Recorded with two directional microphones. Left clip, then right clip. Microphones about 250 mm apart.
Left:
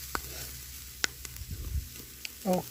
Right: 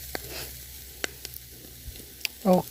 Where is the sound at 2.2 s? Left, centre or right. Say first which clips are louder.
Right 8 dB; right.